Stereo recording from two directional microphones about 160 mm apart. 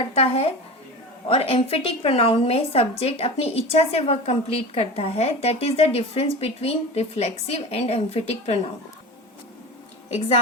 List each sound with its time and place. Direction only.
0.1 s a woman's voice: 40° left (ahead or behind)
10.1 s a woman's voice: 40° left (ahead or behind)